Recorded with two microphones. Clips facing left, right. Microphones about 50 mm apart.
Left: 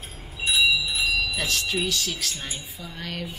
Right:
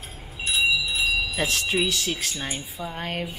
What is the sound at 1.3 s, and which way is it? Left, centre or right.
Speech, right.